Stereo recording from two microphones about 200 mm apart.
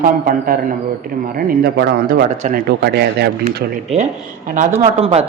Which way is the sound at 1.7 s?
55° right (ahead or behind).